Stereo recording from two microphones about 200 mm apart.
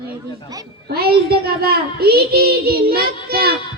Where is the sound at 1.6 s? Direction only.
50° right (ahead or behind).